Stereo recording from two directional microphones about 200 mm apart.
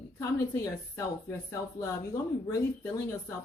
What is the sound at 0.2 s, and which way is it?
A woman's voice, 15° left (ahead or behind).